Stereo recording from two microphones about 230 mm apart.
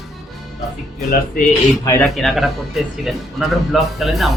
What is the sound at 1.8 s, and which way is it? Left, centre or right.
Speech, centre.